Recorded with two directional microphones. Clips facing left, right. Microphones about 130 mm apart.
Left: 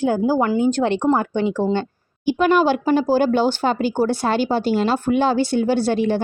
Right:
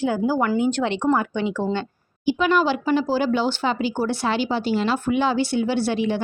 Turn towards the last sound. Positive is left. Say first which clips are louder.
# left 4 dB
turn(degrees=45)  # may be behind; listen again after turning